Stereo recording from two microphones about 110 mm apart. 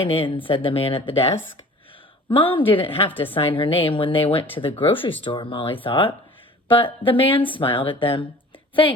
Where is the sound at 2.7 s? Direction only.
55° left (ahead or behind).